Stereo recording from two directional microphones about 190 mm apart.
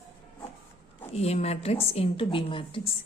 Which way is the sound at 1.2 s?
35° left (ahead or behind).